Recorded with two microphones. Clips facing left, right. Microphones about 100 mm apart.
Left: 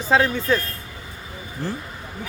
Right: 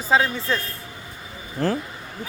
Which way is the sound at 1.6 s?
90° right.